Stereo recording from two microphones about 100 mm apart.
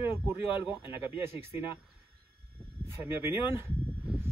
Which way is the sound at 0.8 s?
60° left (ahead or behind).